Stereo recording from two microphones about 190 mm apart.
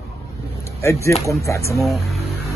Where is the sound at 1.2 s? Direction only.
15° left (ahead or behind).